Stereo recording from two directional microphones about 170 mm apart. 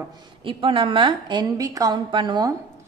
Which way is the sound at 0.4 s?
30° right (ahead or behind).